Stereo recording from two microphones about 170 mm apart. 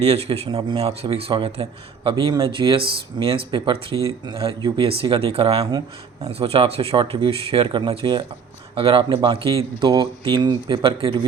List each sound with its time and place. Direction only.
0.0 s speech: 35° right (ahead or behind)